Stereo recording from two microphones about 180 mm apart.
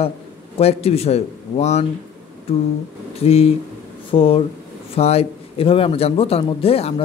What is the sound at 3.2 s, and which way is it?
A man's voice, 35° left (ahead or behind).